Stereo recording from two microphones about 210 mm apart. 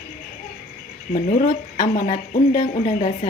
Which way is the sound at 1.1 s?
35° left (ahead or behind).